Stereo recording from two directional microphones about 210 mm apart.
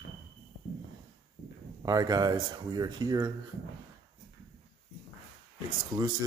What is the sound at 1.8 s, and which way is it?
Speech, 15° right (ahead or behind).